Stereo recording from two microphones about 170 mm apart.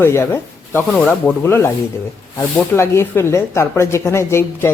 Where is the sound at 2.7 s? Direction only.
15° left (ahead or behind).